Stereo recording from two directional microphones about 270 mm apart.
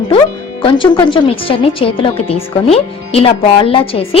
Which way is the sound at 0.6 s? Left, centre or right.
Centre.